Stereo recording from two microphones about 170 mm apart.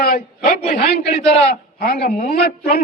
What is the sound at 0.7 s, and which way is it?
A man's voice, 70° left (ahead or behind).